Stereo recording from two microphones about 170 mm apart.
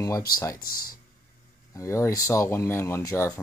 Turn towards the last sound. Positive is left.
turn(degrees=20)  # may be behind; listen again after turning